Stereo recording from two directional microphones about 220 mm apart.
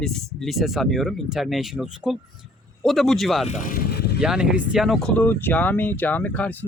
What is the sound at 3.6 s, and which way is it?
Vehicle, 40° left (ahead or behind).